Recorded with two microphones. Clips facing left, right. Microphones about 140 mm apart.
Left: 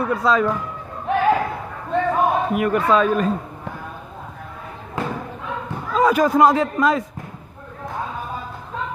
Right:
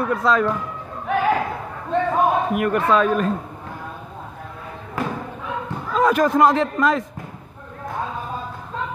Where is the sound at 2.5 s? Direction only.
Centre (ahead or behind).